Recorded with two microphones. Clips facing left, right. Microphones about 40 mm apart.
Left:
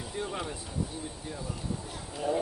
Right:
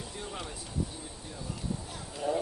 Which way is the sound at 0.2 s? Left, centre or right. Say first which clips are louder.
Left 7 dB; centre.